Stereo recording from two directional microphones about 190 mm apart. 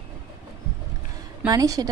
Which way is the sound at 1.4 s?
20° right (ahead or behind).